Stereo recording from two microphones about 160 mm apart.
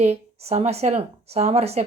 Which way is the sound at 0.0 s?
45° right (ahead or behind).